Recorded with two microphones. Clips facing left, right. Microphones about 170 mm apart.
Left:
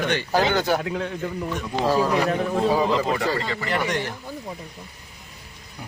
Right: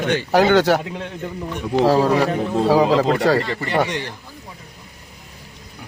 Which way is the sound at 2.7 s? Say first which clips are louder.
Right 9 dB; 80° right.